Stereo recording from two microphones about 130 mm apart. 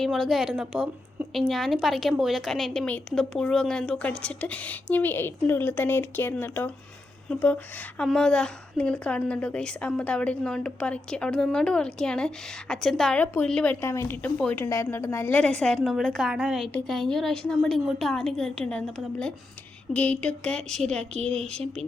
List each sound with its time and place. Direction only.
0.0 s a woman's voice: centre (ahead or behind)
13.8 s a woman's voice: 20° left (ahead or behind)
14.6 s a woman's voice: 20° left (ahead or behind); by 21.0 s 5° left (ahead or behind)